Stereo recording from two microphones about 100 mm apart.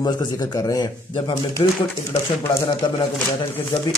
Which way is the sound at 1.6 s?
50° left (ahead or behind).